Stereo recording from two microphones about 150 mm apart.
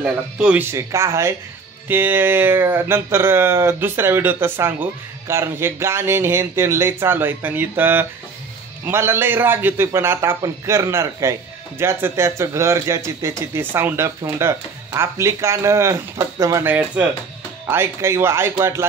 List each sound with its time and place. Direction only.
0.0 s speech: 10° right (ahead or behind)
16.6 s speech: 10° right (ahead or behind)